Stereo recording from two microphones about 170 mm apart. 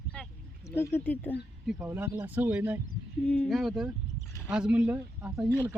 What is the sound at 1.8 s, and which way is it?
Speech, 15° right (ahead or behind).